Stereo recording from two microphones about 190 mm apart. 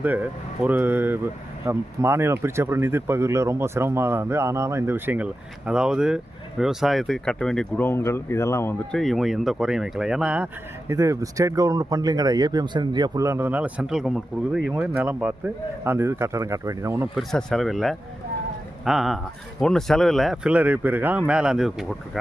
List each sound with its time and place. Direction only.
0.0 s speech: 10° right (ahead or behind); by 9.0 s 15° left (ahead or behind)
9.0 s speech: centre (ahead or behind)
17.2 s speech: centre (ahead or behind)